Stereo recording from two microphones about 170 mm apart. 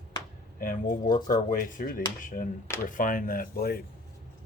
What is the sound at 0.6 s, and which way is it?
Speech, 55° left (ahead or behind).